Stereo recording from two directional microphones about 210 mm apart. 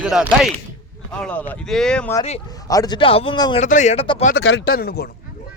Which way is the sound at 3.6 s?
35° left (ahead or behind).